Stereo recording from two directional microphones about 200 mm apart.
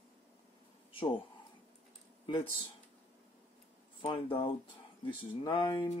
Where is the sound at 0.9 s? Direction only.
25° left (ahead or behind).